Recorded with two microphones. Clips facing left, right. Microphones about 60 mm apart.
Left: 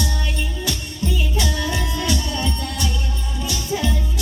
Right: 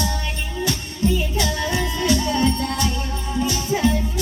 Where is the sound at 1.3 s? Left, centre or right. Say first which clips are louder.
Right 1 dB; right.